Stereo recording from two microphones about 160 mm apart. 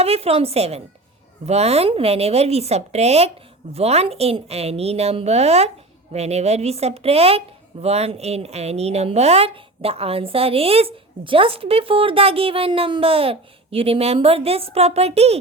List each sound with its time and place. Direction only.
0.0 s a woman's voice: 40° right (ahead or behind)